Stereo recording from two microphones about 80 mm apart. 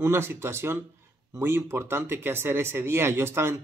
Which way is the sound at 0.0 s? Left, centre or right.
Right.